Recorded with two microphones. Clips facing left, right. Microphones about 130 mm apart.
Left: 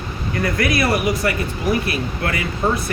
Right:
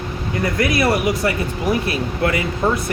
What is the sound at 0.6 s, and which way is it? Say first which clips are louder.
Speech: right 2 dB; 25° right (ahead or behind).